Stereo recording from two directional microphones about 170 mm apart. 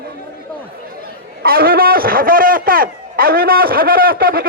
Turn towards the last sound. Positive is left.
turn(degrees=-60)  # may be behind; listen again after turning